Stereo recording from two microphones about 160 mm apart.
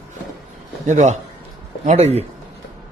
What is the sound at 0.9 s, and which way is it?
Speech, 50° right (ahead or behind).